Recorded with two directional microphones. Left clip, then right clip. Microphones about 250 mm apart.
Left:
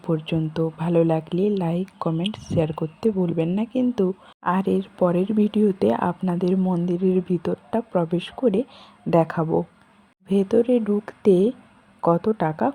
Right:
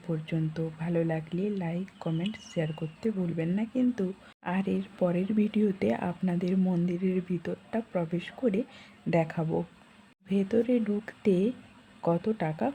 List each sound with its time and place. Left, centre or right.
0.0 s speech: left